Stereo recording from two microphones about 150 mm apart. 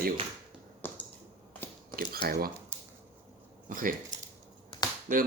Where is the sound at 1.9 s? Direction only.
90° right.